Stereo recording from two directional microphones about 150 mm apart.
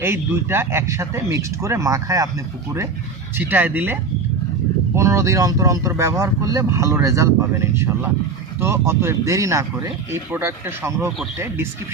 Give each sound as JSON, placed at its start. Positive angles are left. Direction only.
{"t": 0.0, "sound": "speech", "side_deg": -15}
{"t": 3.3, "sound": "speech", "side_deg": -10}
{"t": 4.9, "sound": "speech", "side_deg": -20}